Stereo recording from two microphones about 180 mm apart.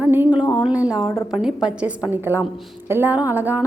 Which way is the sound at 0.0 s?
10° right (ahead or behind).